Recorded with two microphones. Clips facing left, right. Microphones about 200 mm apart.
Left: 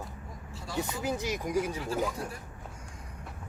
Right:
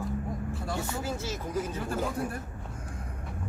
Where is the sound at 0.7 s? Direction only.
15° left (ahead or behind).